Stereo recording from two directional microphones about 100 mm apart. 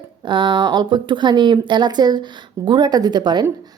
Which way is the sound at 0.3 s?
50° right (ahead or behind).